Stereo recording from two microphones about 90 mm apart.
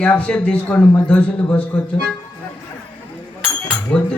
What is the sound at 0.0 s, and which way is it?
A man's voice, 15° left (ahead or behind).